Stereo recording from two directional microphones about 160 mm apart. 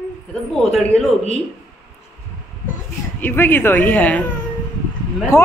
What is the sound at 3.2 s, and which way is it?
A man's voice, 10° left (ahead or behind).